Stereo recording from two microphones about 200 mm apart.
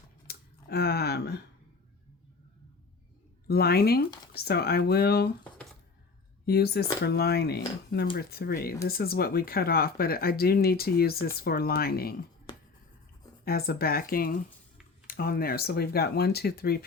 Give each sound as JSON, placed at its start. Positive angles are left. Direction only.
{"t": 0.3, "sound": "a sound", "side_deg": 50}
{"t": 3.4, "sound": "a woman's voice", "side_deg": 50}
{"t": 6.4, "sound": "speech", "side_deg": 50}
{"t": 12.5, "sound": "finger snapping", "side_deg": 20}
{"t": 13.4, "sound": "speech", "side_deg": 50}